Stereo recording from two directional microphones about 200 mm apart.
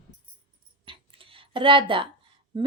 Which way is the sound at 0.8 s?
25° right (ahead or behind).